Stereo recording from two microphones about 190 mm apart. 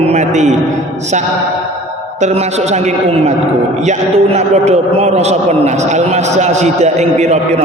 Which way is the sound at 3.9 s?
35° right (ahead or behind).